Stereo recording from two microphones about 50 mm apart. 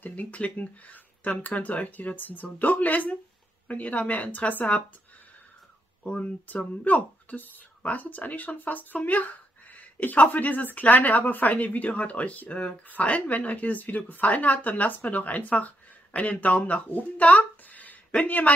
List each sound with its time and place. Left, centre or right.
0.0 s speech: left
6.0 s speech: left